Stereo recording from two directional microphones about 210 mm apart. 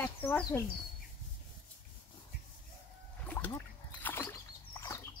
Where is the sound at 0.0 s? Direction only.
10° left (ahead or behind).